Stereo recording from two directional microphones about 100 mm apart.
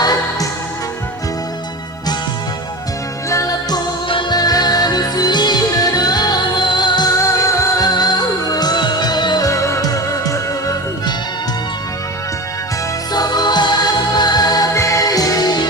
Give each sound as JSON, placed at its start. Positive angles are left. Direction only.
{"t": 0.0, "sound": "music", "side_deg": 40}
{"t": 3.2, "sound": "music", "side_deg": 35}
{"t": 4.1, "sound": "music", "side_deg": 50}
{"t": 7.2, "sound": "music", "side_deg": 35}
{"t": 9.5, "sound": "music", "side_deg": 30}
{"t": 13.1, "sound": "music", "side_deg": 40}
{"t": 14.7, "sound": "music", "side_deg": 30}